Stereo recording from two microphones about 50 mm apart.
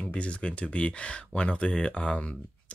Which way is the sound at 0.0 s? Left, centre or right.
Left.